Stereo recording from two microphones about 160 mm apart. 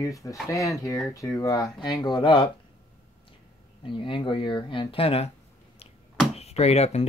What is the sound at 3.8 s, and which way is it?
Speech, 30° left (ahead or behind).